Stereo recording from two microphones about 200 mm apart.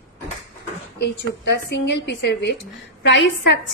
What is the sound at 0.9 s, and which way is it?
A woman's voice, 55° left (ahead or behind).